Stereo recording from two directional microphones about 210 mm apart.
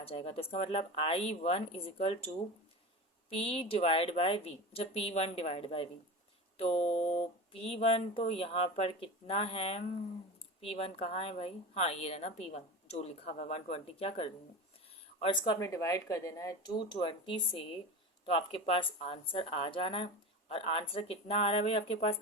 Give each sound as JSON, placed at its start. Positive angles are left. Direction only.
{"t": 0.0, "sound": "a woman's voice", "side_deg": 25}